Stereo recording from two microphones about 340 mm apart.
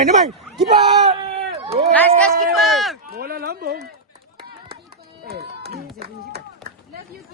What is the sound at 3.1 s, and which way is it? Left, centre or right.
Speech, right.